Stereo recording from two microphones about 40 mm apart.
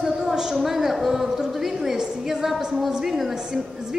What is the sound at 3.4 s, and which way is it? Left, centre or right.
Speech, centre.